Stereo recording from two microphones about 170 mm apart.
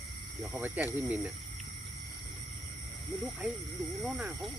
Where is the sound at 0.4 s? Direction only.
10° right (ahead or behind).